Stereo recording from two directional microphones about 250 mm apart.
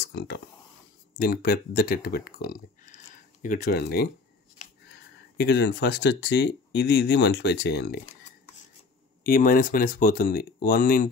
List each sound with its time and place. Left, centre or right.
0.1 s speech: left
5.4 s speech: left
9.2 s speech: left